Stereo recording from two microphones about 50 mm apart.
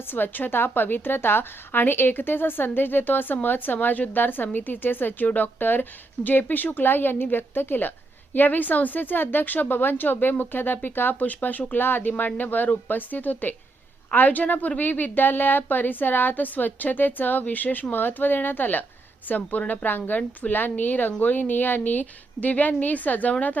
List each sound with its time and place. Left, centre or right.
0.1 s a woman's voice: left